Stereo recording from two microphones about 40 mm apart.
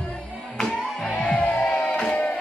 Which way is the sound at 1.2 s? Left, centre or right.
Left.